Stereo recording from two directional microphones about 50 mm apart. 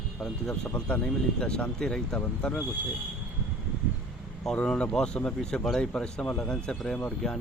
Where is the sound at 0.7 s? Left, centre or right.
Left.